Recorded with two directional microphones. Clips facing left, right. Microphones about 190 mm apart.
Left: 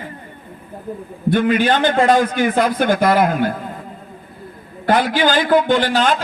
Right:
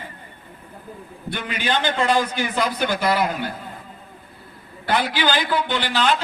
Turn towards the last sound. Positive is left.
turn(degrees=50)  # may be behind; listen again after turning